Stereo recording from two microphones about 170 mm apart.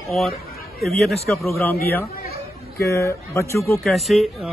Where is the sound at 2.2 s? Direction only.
65° left (ahead or behind).